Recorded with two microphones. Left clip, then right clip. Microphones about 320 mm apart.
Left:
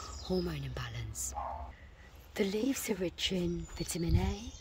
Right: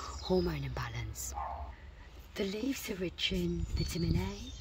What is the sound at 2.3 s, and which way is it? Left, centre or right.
Speech, centre.